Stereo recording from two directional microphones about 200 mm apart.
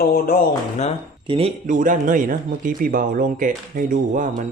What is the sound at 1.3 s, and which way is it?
Speech, 30° right (ahead or behind).